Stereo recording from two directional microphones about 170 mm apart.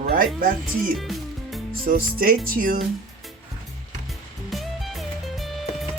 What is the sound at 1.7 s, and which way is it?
Speech, 60° right (ahead or behind).